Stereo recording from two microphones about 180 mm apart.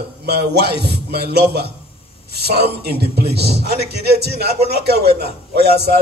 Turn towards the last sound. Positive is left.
turn(degrees=-65)  # may be behind; listen again after turning